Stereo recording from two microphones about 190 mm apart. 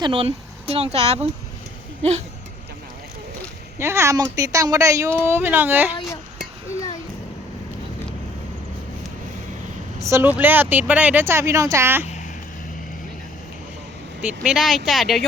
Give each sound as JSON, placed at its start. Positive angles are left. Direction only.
{"t": 0.0, "sound": "speech", "side_deg": -30}
{"t": 3.8, "sound": "speech", "side_deg": -15}
{"t": 10.0, "sound": "speech", "side_deg": -15}
{"t": 14.2, "sound": "speech", "side_deg": -5}